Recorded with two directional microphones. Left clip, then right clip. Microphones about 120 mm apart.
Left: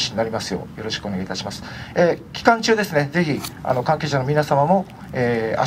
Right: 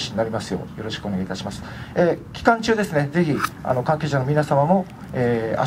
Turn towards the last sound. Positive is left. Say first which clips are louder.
# left 1 dB
turn(degrees=40)  # may be behind; listen again after turning